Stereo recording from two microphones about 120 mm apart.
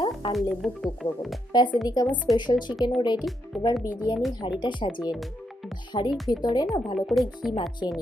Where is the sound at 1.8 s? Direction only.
35° left (ahead or behind).